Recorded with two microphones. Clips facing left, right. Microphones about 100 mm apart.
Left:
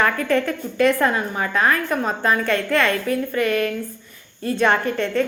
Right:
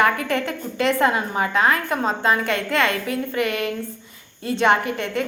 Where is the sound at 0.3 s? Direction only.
20° right (ahead or behind).